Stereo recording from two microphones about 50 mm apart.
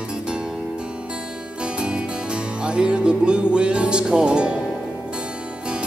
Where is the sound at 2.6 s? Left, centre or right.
Centre.